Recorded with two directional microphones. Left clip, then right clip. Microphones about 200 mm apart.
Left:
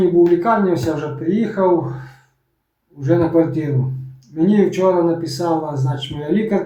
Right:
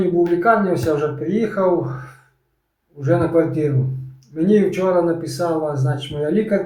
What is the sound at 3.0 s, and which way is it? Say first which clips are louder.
Speech: left 1 dB; centre (ahead or behind).